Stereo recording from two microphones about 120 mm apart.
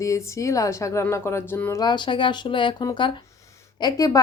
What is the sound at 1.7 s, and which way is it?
Speech, 40° left (ahead or behind).